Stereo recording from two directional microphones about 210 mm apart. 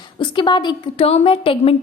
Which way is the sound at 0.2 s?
20° left (ahead or behind).